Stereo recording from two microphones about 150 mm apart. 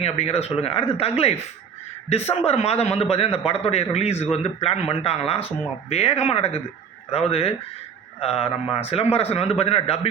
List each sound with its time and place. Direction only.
0.0 s speech: 45° left (ahead or behind)
2.4 s a man's voice: 45° left (ahead or behind)